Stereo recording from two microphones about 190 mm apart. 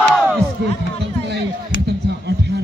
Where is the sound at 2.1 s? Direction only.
60° right (ahead or behind).